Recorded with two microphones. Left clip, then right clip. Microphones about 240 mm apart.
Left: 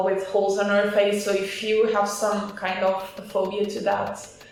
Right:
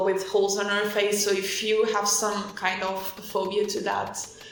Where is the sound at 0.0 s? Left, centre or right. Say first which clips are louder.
Left 1 dB; right.